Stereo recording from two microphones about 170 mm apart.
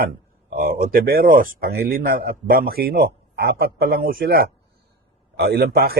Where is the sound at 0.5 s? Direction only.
60° right (ahead or behind).